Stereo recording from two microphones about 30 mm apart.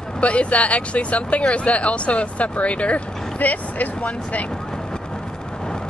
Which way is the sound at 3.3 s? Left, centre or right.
Left.